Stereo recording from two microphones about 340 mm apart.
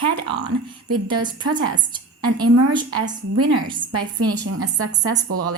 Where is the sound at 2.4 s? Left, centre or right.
Right.